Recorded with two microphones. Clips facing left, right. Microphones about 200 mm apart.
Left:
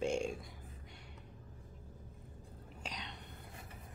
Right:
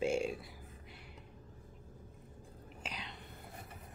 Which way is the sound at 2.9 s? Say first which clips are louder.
Even; 5° right (ahead or behind).